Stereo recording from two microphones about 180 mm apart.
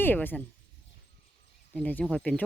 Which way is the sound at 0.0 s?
10° left (ahead or behind).